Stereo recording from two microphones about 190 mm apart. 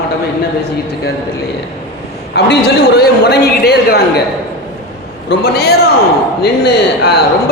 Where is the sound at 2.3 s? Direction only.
60° left (ahead or behind).